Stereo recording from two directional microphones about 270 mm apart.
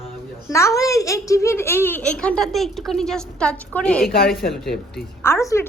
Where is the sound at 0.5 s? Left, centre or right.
Centre.